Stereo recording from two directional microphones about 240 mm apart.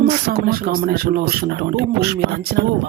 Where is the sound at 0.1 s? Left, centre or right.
Right.